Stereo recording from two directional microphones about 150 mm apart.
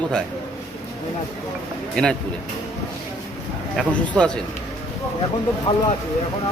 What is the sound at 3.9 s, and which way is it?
Speech, 5° left (ahead or behind).